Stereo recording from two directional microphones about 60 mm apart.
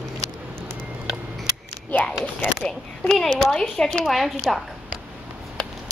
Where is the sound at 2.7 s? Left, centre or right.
Centre.